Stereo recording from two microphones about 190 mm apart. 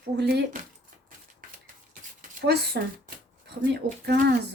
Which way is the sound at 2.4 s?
60° right (ahead or behind).